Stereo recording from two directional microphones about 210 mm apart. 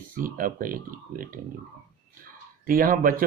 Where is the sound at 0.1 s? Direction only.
40° right (ahead or behind).